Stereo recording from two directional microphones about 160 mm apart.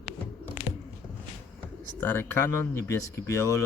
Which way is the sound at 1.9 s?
15° left (ahead or behind).